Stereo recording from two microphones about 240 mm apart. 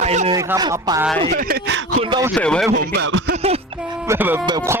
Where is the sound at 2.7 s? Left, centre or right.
Right.